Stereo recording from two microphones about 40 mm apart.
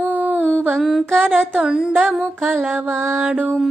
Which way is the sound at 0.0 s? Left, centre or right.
Right.